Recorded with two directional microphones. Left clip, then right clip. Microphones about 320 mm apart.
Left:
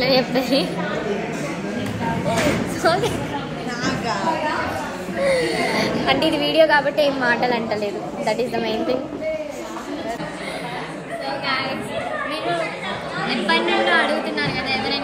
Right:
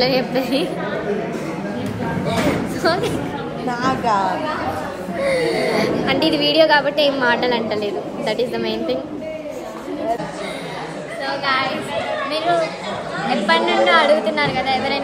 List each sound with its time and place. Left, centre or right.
0.0 s a woman's voice: centre
2.8 s a woman's voice: centre
3.8 s a woman's voice: centre
5.2 s a woman's voice: centre
13.5 s a woman's voice: right